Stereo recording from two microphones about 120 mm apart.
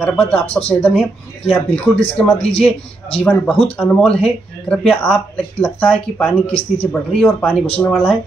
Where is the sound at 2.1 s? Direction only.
15° left (ahead or behind).